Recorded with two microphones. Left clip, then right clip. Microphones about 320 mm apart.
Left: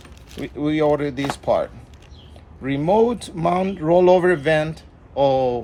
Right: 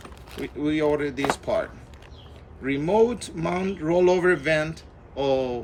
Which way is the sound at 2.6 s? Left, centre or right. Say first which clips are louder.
Left 3 dB; centre.